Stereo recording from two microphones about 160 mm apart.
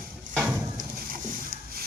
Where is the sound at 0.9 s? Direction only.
65° right (ahead or behind).